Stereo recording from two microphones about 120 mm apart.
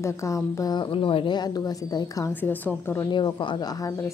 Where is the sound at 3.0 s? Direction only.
40° left (ahead or behind).